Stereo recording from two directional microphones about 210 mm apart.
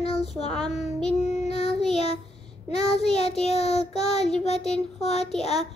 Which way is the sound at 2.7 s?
5° left (ahead or behind).